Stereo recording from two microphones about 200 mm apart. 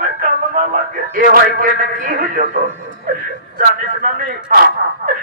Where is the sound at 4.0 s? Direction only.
45° right (ahead or behind).